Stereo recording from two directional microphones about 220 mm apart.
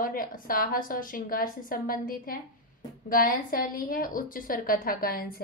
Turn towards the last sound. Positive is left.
turn(degrees=40)  # may be behind; listen again after turning